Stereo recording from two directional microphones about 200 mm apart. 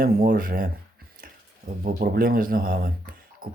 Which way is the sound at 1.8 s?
50° right (ahead or behind).